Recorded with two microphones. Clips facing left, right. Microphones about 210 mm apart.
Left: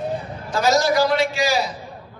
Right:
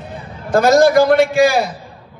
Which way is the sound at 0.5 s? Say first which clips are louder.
Right 8 dB; 55° right (ahead or behind).